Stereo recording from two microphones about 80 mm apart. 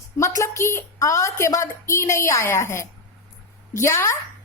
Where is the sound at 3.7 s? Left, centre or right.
Left.